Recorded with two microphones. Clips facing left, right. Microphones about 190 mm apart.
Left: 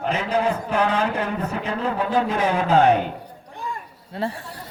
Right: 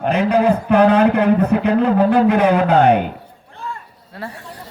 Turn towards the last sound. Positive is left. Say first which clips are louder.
# left 4 dB
turn(degrees=25)  # may be behind; listen again after turning